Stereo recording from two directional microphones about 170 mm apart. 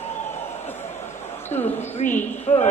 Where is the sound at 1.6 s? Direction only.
45° left (ahead or behind).